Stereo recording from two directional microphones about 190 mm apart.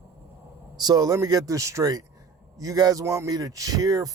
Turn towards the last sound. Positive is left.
turn(degrees=-20)  # may be behind; listen again after turning